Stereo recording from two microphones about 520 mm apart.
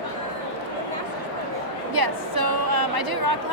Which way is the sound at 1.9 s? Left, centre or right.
Right.